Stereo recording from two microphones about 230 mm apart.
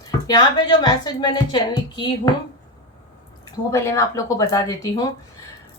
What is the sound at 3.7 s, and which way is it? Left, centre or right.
A woman's voice, centre.